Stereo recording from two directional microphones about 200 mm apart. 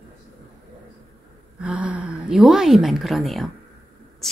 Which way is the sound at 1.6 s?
5° right (ahead or behind).